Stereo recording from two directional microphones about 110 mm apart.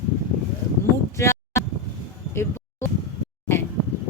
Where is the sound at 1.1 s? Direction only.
25° left (ahead or behind).